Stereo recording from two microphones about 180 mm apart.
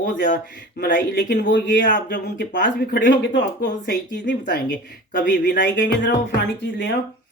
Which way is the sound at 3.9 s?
75° left (ahead or behind).